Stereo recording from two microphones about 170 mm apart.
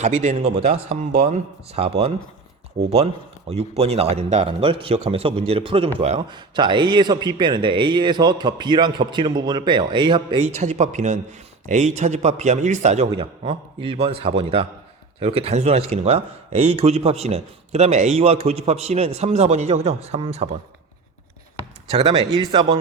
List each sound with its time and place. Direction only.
0.0 s speech: 45° right (ahead or behind)
1.1 s speech: 60° right (ahead or behind)
1.7 s a man's voice: 35° right (ahead or behind)
3.5 s a man's voice: 35° right (ahead or behind)
10.4 s a man's voice: 45° right (ahead or behind)
21.9 s a man's voice: 30° right (ahead or behind)